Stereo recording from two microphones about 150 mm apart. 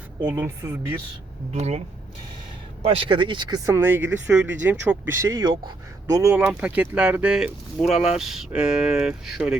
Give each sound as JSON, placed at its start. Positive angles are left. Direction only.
{"t": 0.2, "sound": "speech", "side_deg": -15}
{"t": 1.5, "sound": "speech", "side_deg": -45}
{"t": 2.8, "sound": "speech", "side_deg": -35}
{"t": 3.8, "sound": "speech", "side_deg": -15}
{"t": 6.3, "sound": "speech", "side_deg": -5}